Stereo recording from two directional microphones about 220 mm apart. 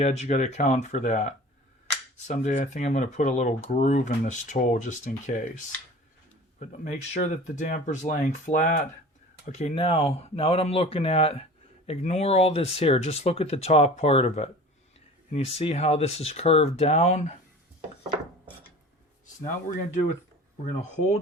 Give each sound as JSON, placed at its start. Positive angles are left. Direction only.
{"t": 0.0, "sound": "speech", "side_deg": 30}
{"t": 6.6, "sound": "speech", "side_deg": 30}
{"t": 19.6, "sound": "speech", "side_deg": 35}